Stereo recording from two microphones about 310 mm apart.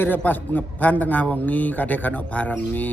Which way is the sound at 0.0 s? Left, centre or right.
Centre.